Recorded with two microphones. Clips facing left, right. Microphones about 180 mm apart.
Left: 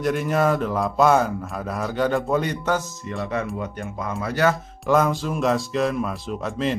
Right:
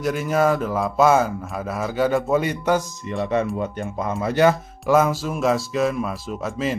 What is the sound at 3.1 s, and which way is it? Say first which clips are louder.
Speech: right 5 dB; 20° right (ahead or behind).